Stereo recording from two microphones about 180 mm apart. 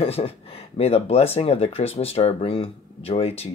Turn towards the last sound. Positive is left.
turn(degrees=35)  # may be behind; listen again after turning